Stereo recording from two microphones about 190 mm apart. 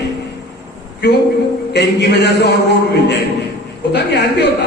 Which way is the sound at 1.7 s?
60° left (ahead or behind).